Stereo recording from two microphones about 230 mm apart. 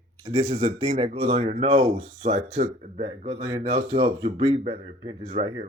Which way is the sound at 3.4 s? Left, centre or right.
Centre.